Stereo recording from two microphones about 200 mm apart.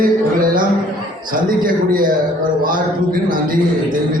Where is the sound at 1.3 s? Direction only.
45° right (ahead or behind).